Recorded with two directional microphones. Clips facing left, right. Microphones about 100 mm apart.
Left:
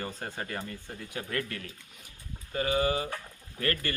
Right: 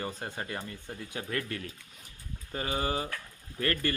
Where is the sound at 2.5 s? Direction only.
30° right (ahead or behind).